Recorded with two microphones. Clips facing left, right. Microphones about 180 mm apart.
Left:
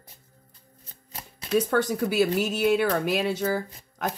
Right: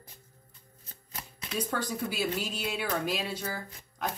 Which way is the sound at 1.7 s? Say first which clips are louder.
Left 9 dB; 60° left (ahead or behind).